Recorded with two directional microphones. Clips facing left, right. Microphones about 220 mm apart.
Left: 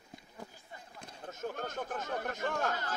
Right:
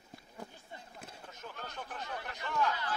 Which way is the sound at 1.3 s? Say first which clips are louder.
Left 9 dB; 45° left (ahead or behind).